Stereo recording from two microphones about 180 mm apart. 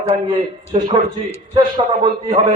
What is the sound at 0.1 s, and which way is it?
Speech, 25° right (ahead or behind).